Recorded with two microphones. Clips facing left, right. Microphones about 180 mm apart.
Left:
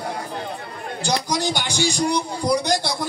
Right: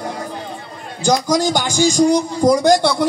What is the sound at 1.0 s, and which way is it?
A man's voice, 45° right (ahead or behind).